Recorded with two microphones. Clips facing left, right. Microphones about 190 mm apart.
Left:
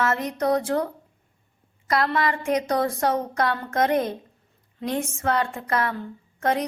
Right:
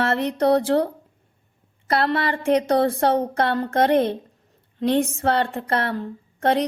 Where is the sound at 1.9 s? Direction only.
30° right (ahead or behind).